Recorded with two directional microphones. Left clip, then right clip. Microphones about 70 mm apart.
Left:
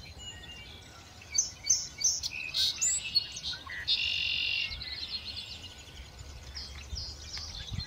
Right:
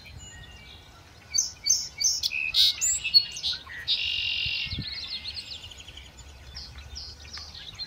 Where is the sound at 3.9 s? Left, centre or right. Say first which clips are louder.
Right 3 dB; centre.